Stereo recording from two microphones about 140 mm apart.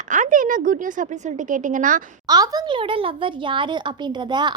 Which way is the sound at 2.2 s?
25° right (ahead or behind).